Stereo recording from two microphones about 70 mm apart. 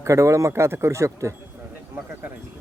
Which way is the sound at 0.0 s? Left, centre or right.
Right.